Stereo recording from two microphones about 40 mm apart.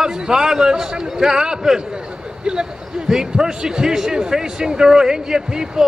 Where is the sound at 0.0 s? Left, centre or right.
Centre.